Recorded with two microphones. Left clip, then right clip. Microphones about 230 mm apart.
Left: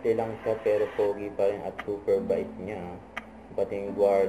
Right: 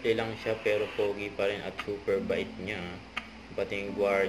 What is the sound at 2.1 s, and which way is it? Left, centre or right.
Speech, right.